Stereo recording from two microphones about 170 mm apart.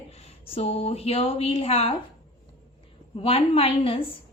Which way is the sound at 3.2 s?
35° left (ahead or behind).